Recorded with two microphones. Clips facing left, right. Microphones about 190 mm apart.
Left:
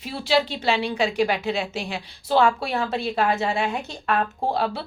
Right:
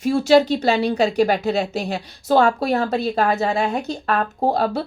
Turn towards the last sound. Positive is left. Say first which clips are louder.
# right 5 dB
turn(degrees=-40)  # may be behind; listen again after turning